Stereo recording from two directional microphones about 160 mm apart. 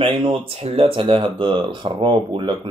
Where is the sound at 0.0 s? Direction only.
30° right (ahead or behind).